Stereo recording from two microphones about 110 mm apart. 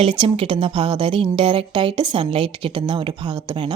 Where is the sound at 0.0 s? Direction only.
55° right (ahead or behind).